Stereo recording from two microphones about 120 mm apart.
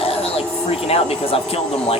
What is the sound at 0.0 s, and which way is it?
Speech, 55° left (ahead or behind).